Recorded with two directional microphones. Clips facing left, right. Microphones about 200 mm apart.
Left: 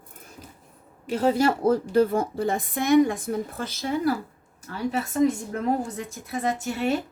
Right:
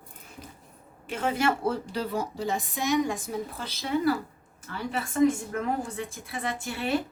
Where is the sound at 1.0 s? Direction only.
35° left (ahead or behind).